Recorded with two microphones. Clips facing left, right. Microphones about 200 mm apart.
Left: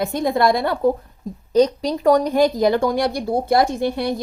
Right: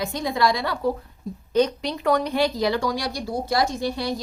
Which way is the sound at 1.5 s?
40° left (ahead or behind).